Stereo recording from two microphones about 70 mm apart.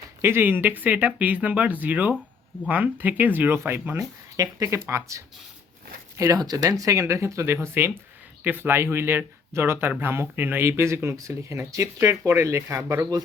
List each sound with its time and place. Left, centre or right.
0.2 s speech: right
4.4 s speech: right
6.4 s speech: right